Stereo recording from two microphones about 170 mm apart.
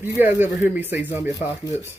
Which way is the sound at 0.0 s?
10° right (ahead or behind).